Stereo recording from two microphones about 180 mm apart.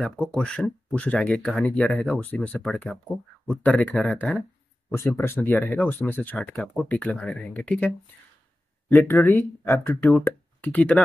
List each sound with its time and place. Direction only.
0.0 s speech: 5° left (ahead or behind)